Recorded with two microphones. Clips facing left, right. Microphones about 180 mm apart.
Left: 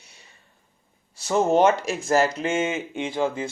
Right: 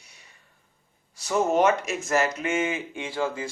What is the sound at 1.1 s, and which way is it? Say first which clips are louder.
Speech: left 3 dB; 30° left (ahead or behind).